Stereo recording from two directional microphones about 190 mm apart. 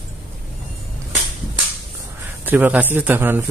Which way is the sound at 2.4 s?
10° right (ahead or behind).